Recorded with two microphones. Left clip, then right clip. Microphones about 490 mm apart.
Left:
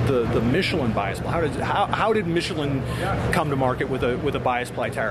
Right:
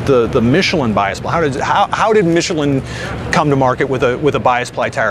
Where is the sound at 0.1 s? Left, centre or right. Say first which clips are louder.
Right 11 dB; right.